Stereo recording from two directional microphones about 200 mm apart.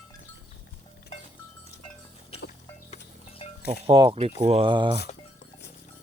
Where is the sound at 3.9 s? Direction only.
25° right (ahead or behind).